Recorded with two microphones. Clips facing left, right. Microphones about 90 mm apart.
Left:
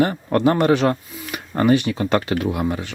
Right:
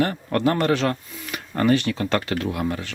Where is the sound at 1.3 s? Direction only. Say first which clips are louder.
Left 3 dB; 15° left (ahead or behind).